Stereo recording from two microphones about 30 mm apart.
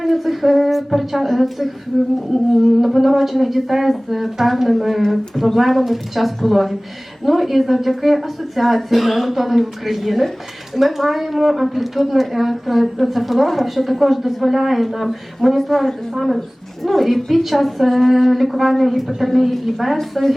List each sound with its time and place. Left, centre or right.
0.0 s a woman's voice: centre
1.9 s a woman's voice: centre
2.3 s a woman's voice: centre
15.5 s a woman's voice: centre